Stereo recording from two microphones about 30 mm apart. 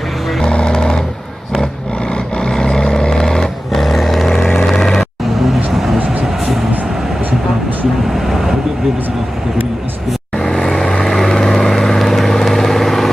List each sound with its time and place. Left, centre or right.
0.4 s vehicle: left
2.5 s vehicle: left
3.7 s vehicle: centre
4.6 s vehicle: centre
5.7 s a sound: centre
8.1 s vehicle: centre
10.3 s vehicle: centre